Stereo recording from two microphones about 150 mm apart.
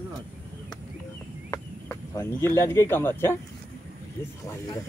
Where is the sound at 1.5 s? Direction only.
20° left (ahead or behind).